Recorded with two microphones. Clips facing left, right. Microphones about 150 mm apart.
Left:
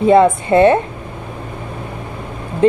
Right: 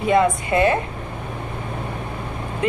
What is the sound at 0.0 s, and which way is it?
Speech, 30° left (ahead or behind).